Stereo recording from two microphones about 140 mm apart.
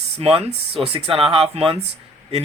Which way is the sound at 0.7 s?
45° right (ahead or behind).